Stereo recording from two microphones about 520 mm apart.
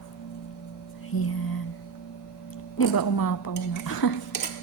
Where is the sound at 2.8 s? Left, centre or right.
Left.